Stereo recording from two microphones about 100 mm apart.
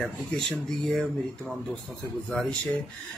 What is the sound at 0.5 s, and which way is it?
Speech, 5° left (ahead or behind).